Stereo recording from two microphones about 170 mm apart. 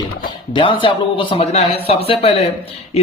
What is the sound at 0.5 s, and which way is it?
A man's voice, 30° left (ahead or behind).